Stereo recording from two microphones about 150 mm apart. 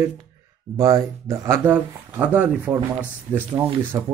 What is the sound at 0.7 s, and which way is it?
Speech, 25° right (ahead or behind).